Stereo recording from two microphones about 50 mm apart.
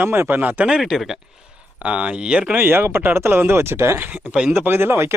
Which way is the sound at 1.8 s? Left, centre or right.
Right.